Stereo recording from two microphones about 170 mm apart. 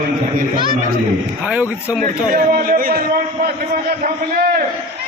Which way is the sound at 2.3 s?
55° right (ahead or behind).